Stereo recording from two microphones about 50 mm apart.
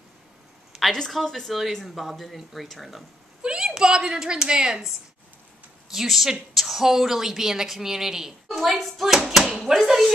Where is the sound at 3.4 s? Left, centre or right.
Centre.